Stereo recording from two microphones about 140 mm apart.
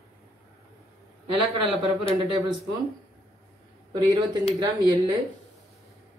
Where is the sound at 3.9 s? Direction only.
30° right (ahead or behind).